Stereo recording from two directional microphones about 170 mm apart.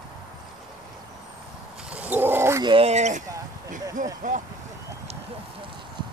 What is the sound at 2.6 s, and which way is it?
Speech, 35° right (ahead or behind).